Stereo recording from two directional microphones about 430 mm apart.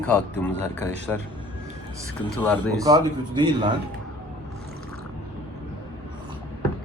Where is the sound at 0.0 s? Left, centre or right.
Centre.